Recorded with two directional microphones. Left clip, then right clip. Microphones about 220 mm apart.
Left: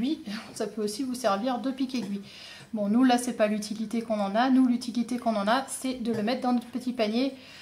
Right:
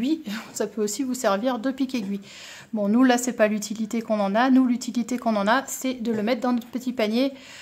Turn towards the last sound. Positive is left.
turn(degrees=-45)  # may be behind; listen again after turning